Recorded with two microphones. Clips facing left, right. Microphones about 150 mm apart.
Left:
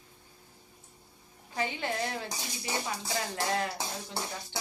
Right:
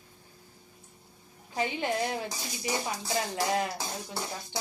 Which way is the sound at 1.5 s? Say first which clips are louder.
Right 3 dB; 20° right (ahead or behind).